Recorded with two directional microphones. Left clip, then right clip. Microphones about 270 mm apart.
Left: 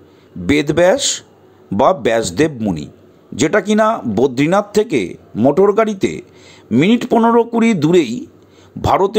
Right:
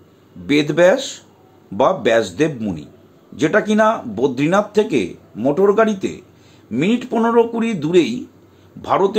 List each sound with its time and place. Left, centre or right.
0.5 s speech: left